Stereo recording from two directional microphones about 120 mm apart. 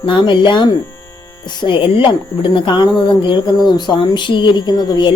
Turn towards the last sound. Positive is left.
turn(degrees=35)  # may be behind; listen again after turning